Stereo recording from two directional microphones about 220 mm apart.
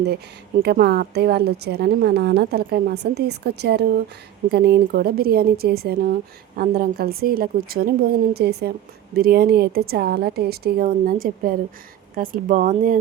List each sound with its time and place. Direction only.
0.6 s speech: 45° right (ahead or behind)